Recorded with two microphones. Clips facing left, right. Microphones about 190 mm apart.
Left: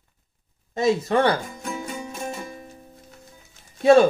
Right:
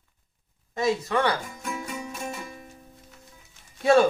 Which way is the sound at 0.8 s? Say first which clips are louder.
Left 4 dB; 30° left (ahead or behind).